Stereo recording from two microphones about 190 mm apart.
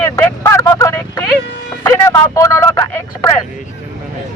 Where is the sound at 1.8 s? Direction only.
15° left (ahead or behind).